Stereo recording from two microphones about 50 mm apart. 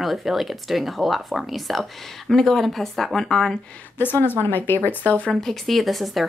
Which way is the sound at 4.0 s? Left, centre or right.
Left.